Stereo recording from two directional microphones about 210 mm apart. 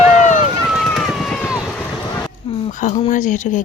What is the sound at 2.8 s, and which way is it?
Speech, 35° left (ahead or behind).